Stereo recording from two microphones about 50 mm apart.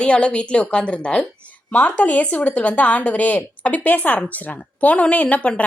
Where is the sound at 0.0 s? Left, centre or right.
Left.